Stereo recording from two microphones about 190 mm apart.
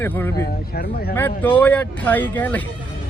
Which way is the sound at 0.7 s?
55° left (ahead or behind).